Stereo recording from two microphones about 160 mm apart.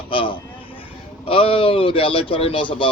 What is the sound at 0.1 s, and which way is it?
Vehicle, 35° left (ahead or behind).